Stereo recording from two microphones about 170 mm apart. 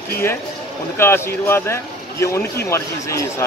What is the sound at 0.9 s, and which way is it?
A man's voice, 15° left (ahead or behind).